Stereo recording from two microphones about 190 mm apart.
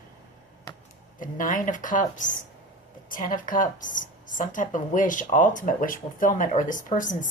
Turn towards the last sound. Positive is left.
turn(degrees=45)  # may be behind; listen again after turning